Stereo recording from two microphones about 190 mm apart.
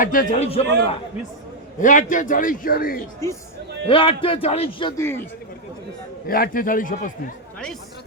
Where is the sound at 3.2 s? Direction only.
15° left (ahead or behind).